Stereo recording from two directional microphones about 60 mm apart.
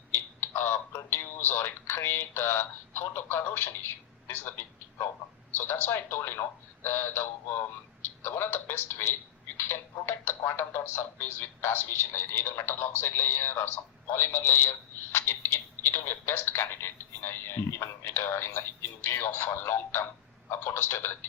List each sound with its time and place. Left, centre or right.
0.3 s speech: left